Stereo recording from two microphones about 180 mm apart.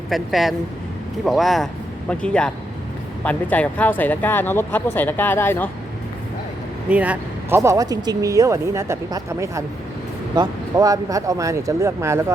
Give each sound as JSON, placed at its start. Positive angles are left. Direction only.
{"t": 0.1, "sound": "speech", "side_deg": 0}
{"t": 6.8, "sound": "speech", "side_deg": -5}